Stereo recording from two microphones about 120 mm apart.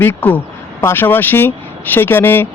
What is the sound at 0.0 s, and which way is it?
Speech, 15° left (ahead or behind).